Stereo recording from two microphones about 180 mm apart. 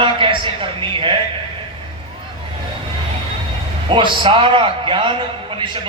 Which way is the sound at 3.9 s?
25° right (ahead or behind).